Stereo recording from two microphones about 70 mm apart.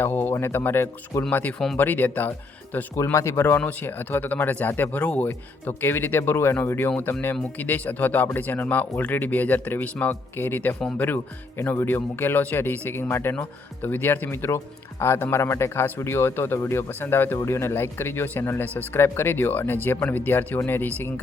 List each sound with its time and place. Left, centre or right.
0.0 s a man's voice: left
1.5 s speech: centre
1.8 s a man's voice: left
2.9 s a man's voice: left
14.3 s a man's voice: left